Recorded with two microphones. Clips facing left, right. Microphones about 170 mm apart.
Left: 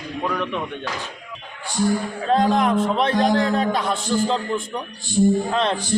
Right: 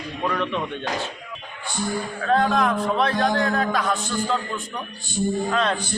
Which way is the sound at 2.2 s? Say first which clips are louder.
Left 1 dB; 20° left (ahead or behind).